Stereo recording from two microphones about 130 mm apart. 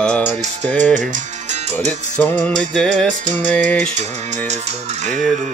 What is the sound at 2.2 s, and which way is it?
Music, 10° left (ahead or behind).